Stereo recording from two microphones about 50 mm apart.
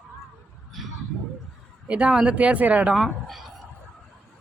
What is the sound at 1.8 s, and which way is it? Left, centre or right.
Speech, right.